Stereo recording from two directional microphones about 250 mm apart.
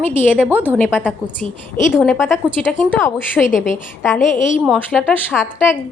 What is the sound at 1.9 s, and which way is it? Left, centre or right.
A woman's voice, centre.